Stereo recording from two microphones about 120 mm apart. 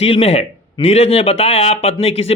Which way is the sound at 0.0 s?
55° left (ahead or behind).